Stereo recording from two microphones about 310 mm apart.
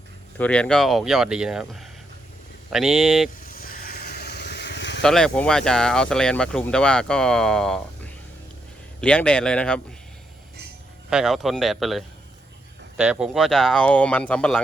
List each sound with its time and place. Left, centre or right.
0.3 s speech: centre
3.4 s vehicle: left
5.0 s speech: centre
11.1 s speech: centre